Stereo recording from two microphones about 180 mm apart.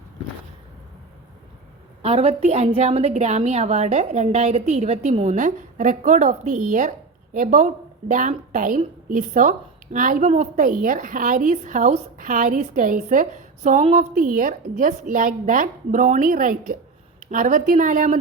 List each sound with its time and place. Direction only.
2.0 s a woman's voice: 35° right (ahead or behind)